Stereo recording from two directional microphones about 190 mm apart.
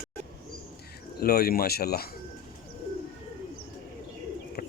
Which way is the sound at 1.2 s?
55° left (ahead or behind).